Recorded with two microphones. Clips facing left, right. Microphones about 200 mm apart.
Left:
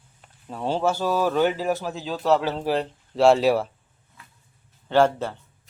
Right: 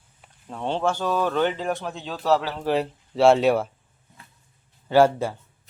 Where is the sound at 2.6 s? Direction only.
Centre (ahead or behind).